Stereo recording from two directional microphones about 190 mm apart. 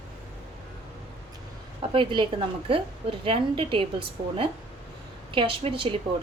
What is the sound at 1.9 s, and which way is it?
A woman's voice, 25° right (ahead or behind).